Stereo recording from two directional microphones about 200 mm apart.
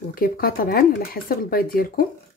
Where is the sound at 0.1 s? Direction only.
45° left (ahead or behind).